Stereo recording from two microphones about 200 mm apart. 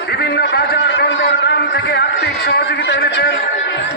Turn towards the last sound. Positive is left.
turn(degrees=60)  # may be behind; listen again after turning